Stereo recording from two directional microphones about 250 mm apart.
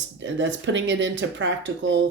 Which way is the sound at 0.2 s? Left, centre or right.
Right.